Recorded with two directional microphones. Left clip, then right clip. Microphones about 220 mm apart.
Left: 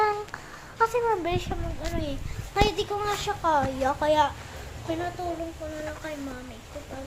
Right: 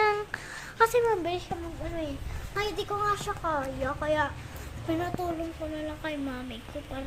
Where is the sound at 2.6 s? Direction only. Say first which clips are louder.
Left 7 dB; 25° right (ahead or behind).